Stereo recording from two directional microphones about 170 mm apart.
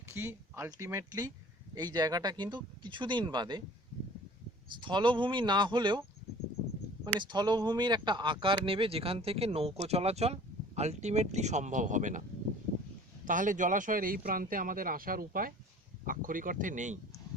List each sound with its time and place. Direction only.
0.0 s speech: 15° right (ahead or behind)
4.8 s speech: 30° right (ahead or behind)
7.2 s speech: 25° right (ahead or behind); by 12.2 s 45° right (ahead or behind)
13.2 s speech: 50° right (ahead or behind)